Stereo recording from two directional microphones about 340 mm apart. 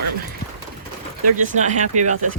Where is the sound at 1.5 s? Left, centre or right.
Right.